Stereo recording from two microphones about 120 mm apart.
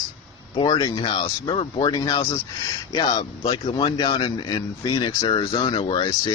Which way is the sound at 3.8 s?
40° left (ahead or behind).